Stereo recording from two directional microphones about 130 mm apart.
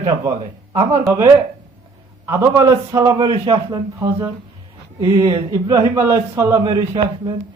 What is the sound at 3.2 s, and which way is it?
Speech, 35° right (ahead or behind).